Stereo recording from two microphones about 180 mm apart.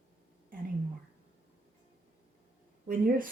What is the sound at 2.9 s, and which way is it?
Speech, 50° right (ahead or behind).